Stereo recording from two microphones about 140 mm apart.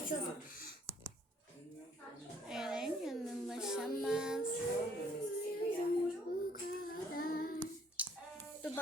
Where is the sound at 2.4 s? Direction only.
5° right (ahead or behind).